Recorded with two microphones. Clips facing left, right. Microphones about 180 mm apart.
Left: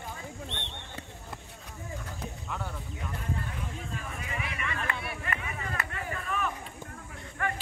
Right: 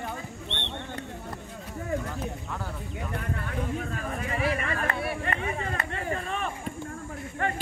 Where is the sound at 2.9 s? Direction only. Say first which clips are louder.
Right 5 dB; 70° right (ahead or behind); by 6.5 s 30° right (ahead or behind).